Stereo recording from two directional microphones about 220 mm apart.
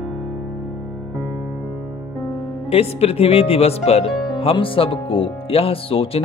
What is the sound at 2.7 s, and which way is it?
Speech, 30° left (ahead or behind).